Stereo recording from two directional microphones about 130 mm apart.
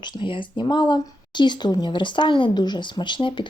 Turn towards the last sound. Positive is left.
turn(degrees=35)  # may be behind; listen again after turning